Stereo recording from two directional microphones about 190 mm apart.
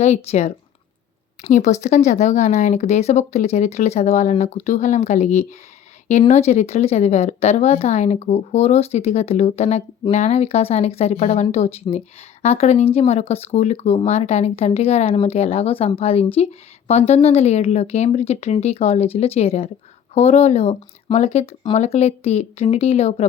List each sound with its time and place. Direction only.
0.0 s speech: 35° left (ahead or behind)